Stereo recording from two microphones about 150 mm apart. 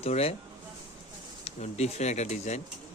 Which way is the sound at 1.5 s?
50° left (ahead or behind).